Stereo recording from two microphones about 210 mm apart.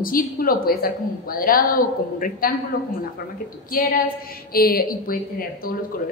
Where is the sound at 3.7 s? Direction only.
45° left (ahead or behind).